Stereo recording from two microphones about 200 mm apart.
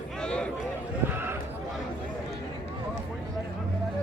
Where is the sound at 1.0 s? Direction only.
10° right (ahead or behind).